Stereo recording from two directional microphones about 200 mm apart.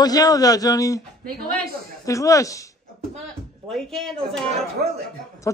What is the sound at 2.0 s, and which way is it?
Speech, 15° left (ahead or behind).